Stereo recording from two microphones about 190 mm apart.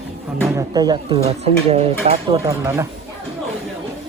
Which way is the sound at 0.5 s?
20° right (ahead or behind).